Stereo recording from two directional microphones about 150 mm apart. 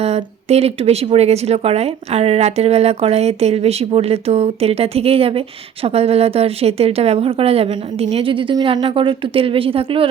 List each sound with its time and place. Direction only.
0.0 s speech: 45° right (ahead or behind)